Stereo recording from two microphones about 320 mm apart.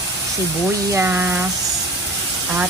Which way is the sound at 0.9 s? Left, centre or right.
Centre.